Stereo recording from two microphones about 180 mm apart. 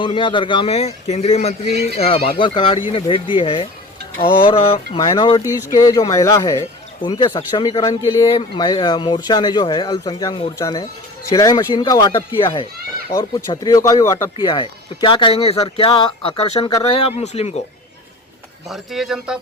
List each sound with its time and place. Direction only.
0.0 s a man's voice: 25° left (ahead or behind)
16.9 s a man's voice: 35° left (ahead or behind)
18.7 s speech: centre (ahead or behind)